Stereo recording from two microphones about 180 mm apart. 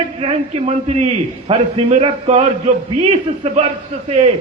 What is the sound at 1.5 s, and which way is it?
Speech, 30° right (ahead or behind).